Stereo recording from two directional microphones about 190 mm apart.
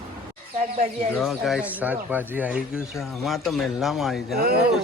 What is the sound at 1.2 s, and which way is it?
A woman's voice, centre (ahead or behind).